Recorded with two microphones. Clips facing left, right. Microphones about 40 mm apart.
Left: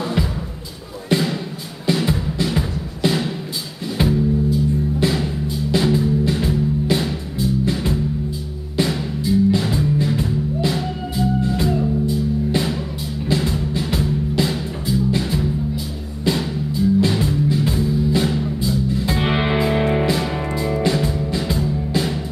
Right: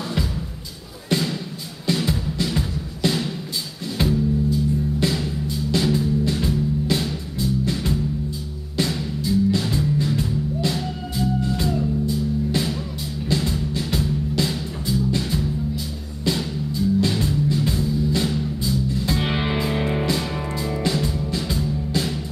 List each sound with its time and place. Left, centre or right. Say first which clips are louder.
1.0 s music: left 4 dB; centre